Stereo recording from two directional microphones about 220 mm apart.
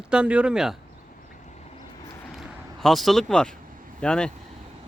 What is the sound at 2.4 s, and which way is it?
Speech, centre (ahead or behind).